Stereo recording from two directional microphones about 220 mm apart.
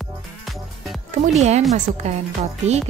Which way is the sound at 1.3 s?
30° right (ahead or behind).